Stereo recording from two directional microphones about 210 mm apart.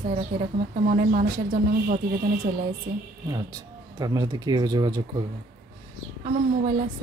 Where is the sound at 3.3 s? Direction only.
20° right (ahead or behind).